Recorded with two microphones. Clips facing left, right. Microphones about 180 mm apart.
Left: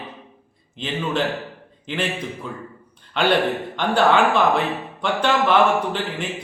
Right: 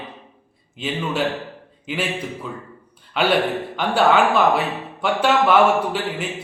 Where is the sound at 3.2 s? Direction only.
5° right (ahead or behind).